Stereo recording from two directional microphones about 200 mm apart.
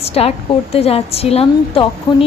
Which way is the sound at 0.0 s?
30° left (ahead or behind).